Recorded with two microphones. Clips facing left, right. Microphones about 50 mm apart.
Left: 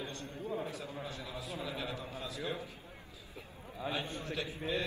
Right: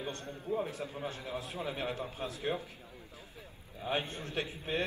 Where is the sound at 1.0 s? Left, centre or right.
Right.